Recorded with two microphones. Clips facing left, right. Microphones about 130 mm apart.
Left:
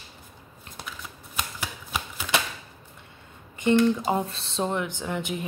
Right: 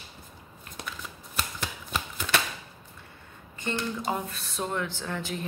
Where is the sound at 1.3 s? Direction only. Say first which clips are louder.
Left 1 dB; 10° left (ahead or behind).